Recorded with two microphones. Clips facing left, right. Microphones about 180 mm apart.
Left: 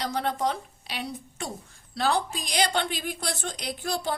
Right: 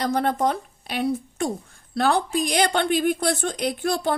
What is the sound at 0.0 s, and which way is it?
A woman's voice, 50° right (ahead or behind).